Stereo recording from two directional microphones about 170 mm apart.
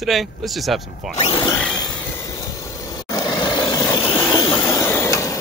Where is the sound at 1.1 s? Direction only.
40° left (ahead or behind).